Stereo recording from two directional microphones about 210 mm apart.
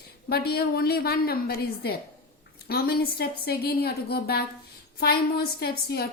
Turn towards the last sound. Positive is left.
turn(degrees=50)  # may be behind; listen again after turning